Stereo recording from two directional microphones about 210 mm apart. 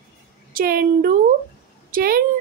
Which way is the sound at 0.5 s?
45° right (ahead or behind).